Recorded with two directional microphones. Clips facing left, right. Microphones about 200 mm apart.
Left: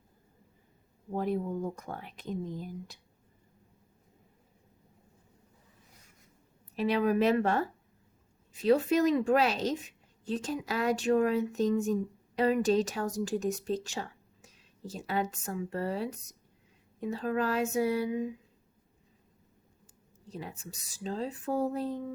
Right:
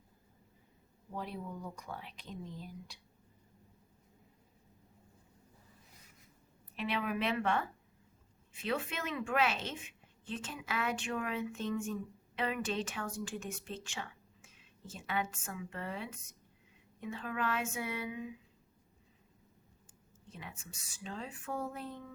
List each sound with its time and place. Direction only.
1.1 s speech: 50° left (ahead or behind)
6.7 s speech: 40° left (ahead or behind)
20.2 s speech: 35° left (ahead or behind)